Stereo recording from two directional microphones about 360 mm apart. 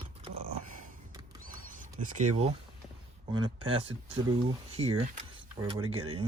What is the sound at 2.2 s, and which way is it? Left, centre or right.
Speech, centre.